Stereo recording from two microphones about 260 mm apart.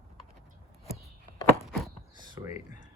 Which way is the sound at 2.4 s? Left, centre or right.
Centre.